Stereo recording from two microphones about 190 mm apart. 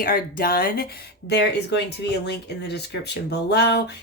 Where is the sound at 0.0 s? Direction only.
50° left (ahead or behind).